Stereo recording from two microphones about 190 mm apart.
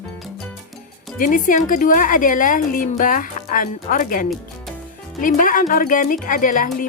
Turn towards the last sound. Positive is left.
turn(degrees=45)  # may be behind; listen again after turning